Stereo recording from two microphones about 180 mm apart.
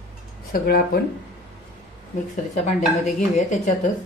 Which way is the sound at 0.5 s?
55° left (ahead or behind).